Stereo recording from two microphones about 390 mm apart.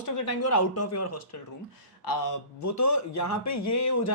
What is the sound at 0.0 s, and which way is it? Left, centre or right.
A man's voice, left.